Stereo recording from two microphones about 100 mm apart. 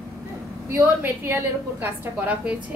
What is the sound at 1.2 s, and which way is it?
A woman's voice, 20° right (ahead or behind).